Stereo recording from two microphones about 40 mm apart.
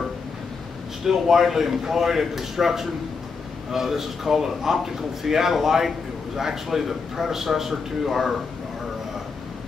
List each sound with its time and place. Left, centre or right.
1.0 s speech: centre